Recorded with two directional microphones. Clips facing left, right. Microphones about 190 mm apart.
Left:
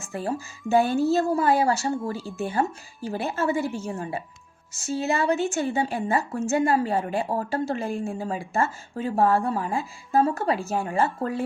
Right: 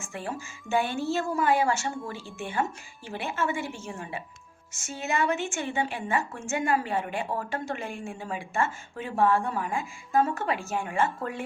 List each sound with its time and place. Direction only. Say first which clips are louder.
0.0 s speech: left 6 dB; 35° left (ahead or behind)